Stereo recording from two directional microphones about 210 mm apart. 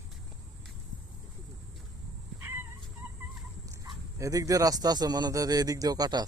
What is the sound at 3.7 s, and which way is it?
Speech, 15° right (ahead or behind).